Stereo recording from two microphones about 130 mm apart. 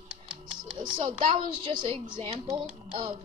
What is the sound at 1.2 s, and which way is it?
Speech, 40° right (ahead or behind).